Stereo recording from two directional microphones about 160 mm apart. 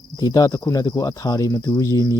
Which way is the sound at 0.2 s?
20° left (ahead or behind).